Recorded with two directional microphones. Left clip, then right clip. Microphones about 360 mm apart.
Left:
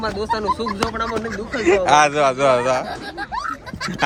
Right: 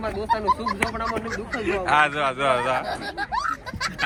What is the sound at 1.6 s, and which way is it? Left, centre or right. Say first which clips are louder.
Speech: left 6 dB; centre.